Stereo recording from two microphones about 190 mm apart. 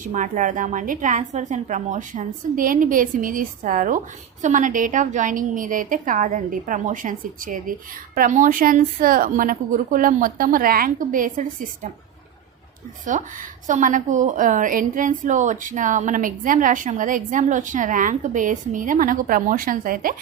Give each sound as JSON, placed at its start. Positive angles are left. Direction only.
{"t": 0.0, "sound": "a woman's voice", "side_deg": -40}
{"t": 13.1, "sound": "a woman's voice", "side_deg": -40}